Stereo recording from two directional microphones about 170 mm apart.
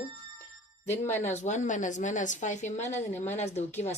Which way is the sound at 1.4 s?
45° left (ahead or behind).